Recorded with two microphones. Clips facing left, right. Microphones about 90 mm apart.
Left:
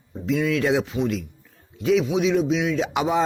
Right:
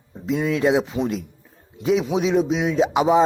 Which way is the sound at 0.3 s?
25° right (ahead or behind).